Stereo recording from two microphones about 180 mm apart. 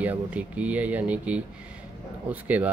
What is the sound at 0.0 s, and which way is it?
Speech, 10° right (ahead or behind).